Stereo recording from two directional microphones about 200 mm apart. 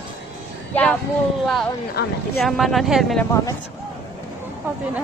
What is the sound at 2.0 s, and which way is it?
Speech, 55° left (ahead or behind).